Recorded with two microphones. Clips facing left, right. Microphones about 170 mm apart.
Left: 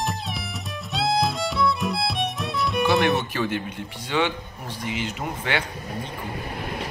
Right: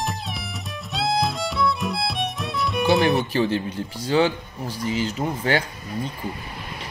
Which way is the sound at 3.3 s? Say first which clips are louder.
Right 4 dB; 30° right (ahead or behind).